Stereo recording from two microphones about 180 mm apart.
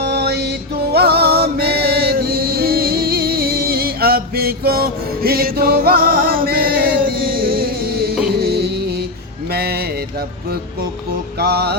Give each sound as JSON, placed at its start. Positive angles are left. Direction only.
{"t": 0.0, "sound": "music", "side_deg": -65}
{"t": 9.5, "sound": "a sound", "side_deg": -60}
{"t": 11.3, "sound": "music", "side_deg": -60}